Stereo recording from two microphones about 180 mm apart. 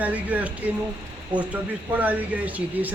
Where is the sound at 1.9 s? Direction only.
10° right (ahead or behind).